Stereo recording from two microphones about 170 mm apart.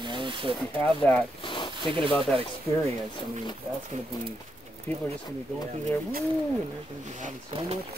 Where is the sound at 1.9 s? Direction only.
30° right (ahead or behind).